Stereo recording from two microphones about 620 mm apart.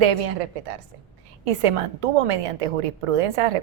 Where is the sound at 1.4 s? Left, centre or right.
Right.